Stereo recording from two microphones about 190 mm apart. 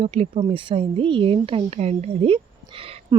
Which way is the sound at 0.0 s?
30° right (ahead or behind).